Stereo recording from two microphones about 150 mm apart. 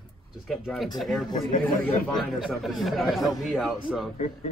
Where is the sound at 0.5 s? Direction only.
Centre (ahead or behind).